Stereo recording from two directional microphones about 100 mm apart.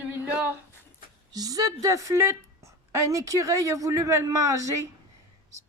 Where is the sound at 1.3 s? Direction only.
40° right (ahead or behind).